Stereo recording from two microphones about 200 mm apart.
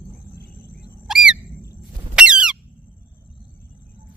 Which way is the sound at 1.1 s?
Centre (ahead or behind).